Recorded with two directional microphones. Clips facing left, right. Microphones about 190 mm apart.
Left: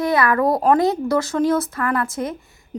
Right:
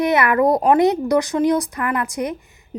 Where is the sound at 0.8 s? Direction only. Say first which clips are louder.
Right 2 dB; 20° right (ahead or behind).